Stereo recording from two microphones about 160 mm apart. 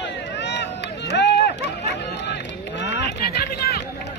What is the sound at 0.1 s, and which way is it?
Run, 90° left.